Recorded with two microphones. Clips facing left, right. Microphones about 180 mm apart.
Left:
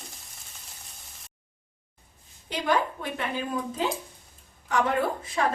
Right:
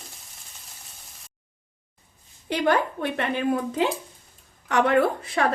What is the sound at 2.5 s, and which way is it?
A woman's voice, 65° right (ahead or behind).